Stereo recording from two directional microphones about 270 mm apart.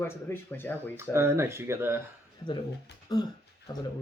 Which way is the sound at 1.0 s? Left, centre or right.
Centre.